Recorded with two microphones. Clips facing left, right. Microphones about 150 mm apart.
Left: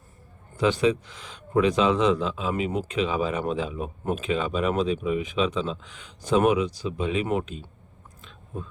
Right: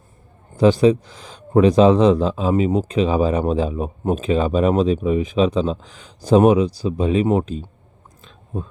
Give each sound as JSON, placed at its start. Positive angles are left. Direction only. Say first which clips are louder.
{"t": 0.5, "sound": "speech", "louder": "right 8 dB", "side_deg": -35}